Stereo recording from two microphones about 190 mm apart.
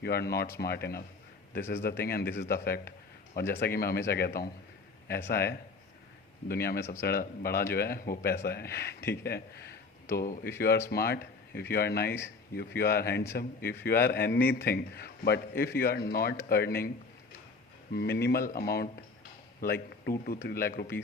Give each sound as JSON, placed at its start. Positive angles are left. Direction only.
{"t": 0.0, "sound": "a man's voice", "side_deg": 55}
{"t": 6.7, "sound": "speech", "side_deg": 15}
{"t": 7.0, "sound": "a man's voice", "side_deg": 55}
{"t": 17.9, "sound": "a man's voice", "side_deg": 55}